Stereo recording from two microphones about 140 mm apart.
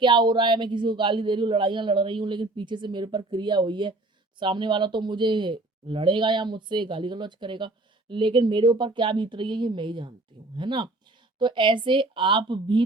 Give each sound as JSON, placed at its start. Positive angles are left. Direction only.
{"t": 0.0, "sound": "speech", "side_deg": -35}